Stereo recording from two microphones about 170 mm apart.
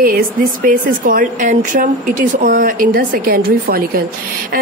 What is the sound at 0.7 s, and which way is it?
A woman's voice, 55° right (ahead or behind).